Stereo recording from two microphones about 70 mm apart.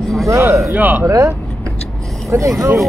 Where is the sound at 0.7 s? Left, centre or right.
Right.